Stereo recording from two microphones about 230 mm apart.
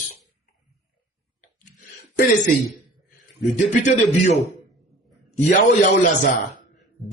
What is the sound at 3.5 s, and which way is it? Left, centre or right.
Speech, left.